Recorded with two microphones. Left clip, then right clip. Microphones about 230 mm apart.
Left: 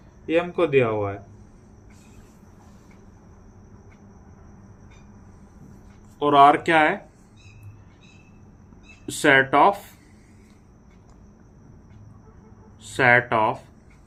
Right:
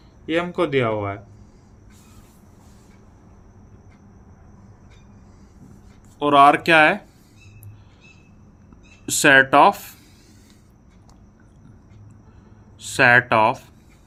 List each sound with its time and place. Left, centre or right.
0.3 s speech: right
6.1 s speech: right
9.0 s speech: right
12.8 s speech: right